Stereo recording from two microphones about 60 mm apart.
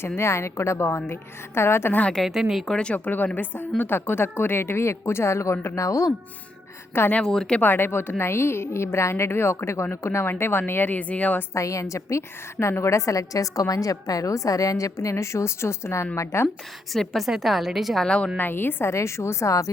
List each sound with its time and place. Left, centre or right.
0.2 s a woman's voice: left
1.9 s speech: left
2.1 s a woman's voice: centre
2.7 s a woman's voice: left
7.2 s speech: centre
7.6 s a woman's voice: left
11.5 s a woman's voice: left
15.1 s a woman's voice: left
16.9 s a woman's voice: centre
17.2 s a woman's voice: centre
18.0 s speech: centre
18.3 s speech: left
18.9 s a woman's voice: left